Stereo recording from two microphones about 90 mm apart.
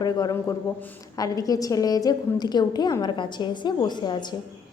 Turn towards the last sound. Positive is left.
turn(degrees=60)  # may be behind; listen again after turning